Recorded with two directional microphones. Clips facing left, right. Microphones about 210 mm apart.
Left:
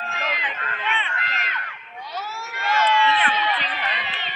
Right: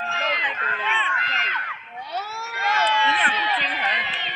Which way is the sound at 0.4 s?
40° right (ahead or behind).